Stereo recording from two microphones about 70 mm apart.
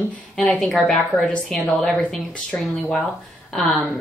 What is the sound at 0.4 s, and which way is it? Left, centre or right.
Speech, centre.